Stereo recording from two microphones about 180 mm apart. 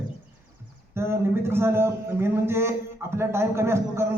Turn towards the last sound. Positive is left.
turn(degrees=-15)  # may be behind; listen again after turning